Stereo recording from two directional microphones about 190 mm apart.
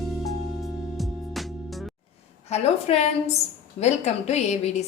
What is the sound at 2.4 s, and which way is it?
A woman's voice, 35° left (ahead or behind).